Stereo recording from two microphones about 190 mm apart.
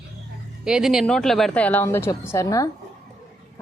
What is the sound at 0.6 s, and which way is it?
Speech, 5° right (ahead or behind).